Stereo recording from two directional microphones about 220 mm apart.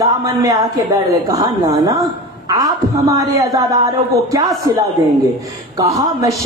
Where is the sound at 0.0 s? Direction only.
15° right (ahead or behind).